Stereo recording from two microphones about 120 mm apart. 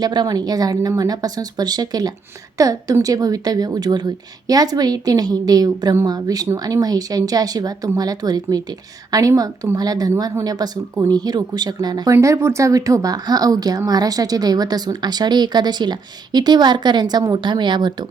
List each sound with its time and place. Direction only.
0.0 s a woman's voice: 35° right (ahead or behind)
12.1 s a woman's voice: 25° right (ahead or behind); by 17.9 s 40° right (ahead or behind)